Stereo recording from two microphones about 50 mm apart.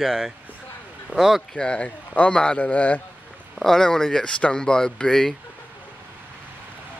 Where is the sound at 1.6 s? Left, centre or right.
Centre.